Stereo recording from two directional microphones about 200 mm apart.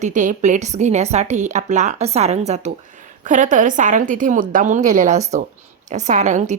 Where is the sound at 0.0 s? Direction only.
40° right (ahead or behind).